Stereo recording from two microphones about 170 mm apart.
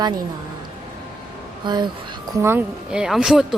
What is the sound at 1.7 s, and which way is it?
Speech, 25° right (ahead or behind).